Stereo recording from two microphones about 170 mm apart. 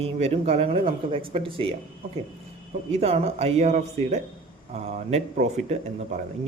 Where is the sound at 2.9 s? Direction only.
35° right (ahead or behind).